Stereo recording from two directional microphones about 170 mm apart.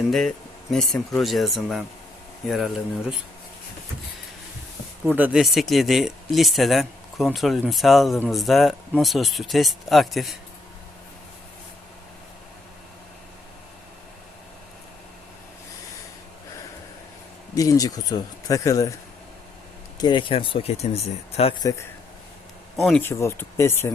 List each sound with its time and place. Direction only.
0.1 s speech: centre (ahead or behind)
5.0 s speech: 10° right (ahead or behind)
17.5 s speech: 20° left (ahead or behind)
20.0 s speech: 25° left (ahead or behind)
21.6 s speech: 20° left (ahead or behind)
22.8 s speech: centre (ahead or behind)
23.0 s speech: 15° left (ahead or behind)